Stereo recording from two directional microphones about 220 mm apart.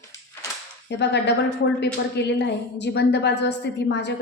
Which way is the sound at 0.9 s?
50° left (ahead or behind).